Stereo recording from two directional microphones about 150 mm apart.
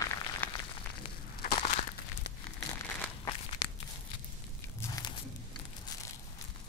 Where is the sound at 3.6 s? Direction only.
25° left (ahead or behind).